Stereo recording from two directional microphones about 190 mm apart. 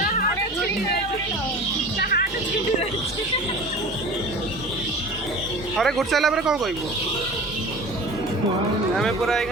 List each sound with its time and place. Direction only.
2.0 s speech: 55° left (ahead or behind)
5.7 s speech: centre (ahead or behind)
9.0 s speech: centre (ahead or behind)